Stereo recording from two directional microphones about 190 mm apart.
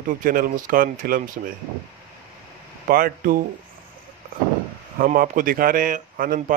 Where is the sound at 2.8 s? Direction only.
50° right (ahead or behind).